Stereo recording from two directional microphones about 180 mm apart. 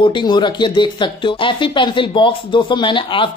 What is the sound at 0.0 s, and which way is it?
Speech, 25° left (ahead or behind).